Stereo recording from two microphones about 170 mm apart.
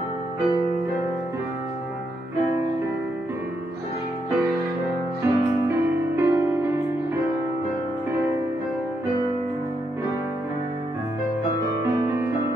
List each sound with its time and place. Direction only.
5.2 s music: 15° right (ahead or behind)
11.8 s music: 15° right (ahead or behind)